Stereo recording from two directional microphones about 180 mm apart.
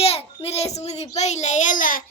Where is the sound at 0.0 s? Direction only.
35° left (ahead or behind).